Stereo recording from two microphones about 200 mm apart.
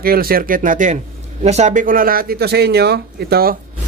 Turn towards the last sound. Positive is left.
turn(degrees=-50)  # may be behind; listen again after turning